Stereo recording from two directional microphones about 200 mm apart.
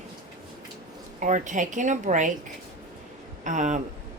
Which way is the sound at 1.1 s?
40° right (ahead or behind).